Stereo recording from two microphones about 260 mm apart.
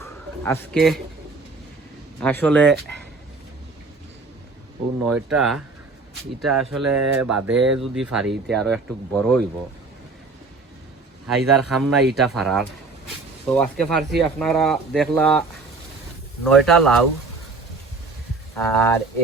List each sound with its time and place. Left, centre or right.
0.0 s a sound: centre
2.2 s speech: centre
5.0 s speech: centre
7.0 s mantra: right
7.4 s speech: centre
11.3 s speech: centre
16.6 s speech: centre
18.5 s speech: centre